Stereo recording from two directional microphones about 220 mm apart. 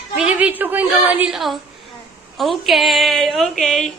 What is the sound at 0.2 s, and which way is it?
A woman's voice, 5° right (ahead or behind).